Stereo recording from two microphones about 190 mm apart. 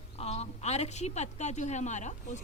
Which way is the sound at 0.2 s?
35° left (ahead or behind).